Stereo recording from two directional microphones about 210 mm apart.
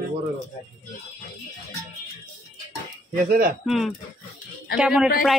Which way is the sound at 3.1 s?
45° right (ahead or behind).